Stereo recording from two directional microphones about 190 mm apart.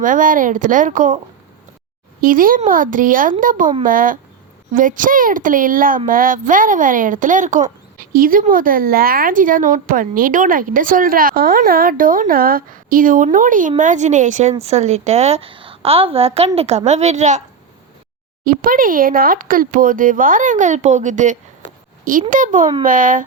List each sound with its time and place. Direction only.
0.0 s a woman's voice: 45° right (ahead or behind)
2.2 s a woman's voice: 45° right (ahead or behind)
18.4 s a woman's voice: 45° right (ahead or behind)